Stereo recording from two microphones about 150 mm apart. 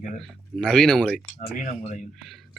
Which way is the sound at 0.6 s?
5° left (ahead or behind).